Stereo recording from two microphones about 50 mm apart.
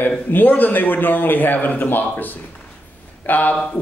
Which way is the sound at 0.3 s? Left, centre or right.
Left.